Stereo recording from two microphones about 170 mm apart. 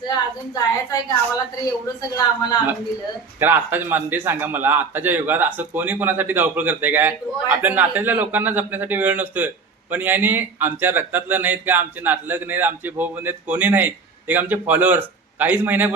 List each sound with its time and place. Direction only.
0.0 s a woman's voice: 25° left (ahead or behind)
2.0 s speech: 25° left (ahead or behind)
3.4 s a man's voice: 10° right (ahead or behind)